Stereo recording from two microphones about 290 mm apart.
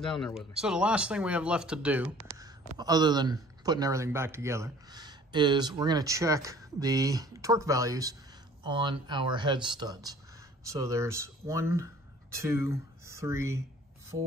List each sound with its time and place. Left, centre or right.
0.0 s a man's voice: centre